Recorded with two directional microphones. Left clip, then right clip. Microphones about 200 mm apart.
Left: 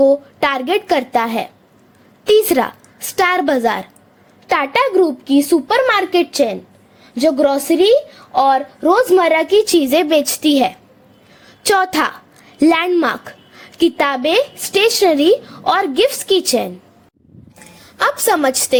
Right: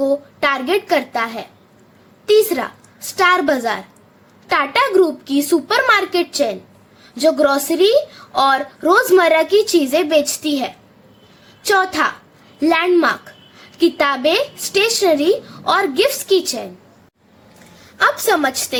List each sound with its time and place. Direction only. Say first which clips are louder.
0.0 s a woman's voice: left 4 dB; 35° left (ahead or behind)
17.9 s speech: even; 30° left (ahead or behind)